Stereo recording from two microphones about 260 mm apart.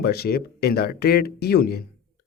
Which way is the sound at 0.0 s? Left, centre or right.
Left.